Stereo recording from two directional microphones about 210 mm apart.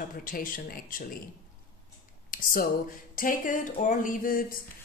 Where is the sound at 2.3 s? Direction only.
40° left (ahead or behind).